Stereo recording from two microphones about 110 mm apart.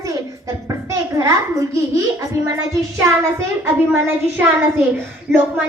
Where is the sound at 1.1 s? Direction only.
30° right (ahead or behind).